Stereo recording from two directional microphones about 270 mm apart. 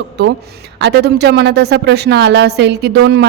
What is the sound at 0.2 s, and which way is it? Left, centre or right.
A man's voice, right.